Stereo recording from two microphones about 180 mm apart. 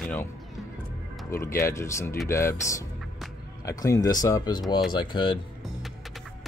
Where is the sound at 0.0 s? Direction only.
10° left (ahead or behind).